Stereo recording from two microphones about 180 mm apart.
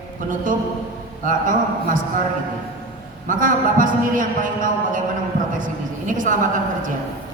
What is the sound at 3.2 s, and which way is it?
A man's voice, 50° right (ahead or behind).